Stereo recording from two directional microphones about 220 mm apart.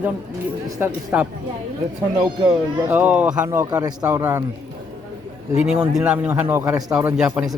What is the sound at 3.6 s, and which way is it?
Speech, 20° right (ahead or behind).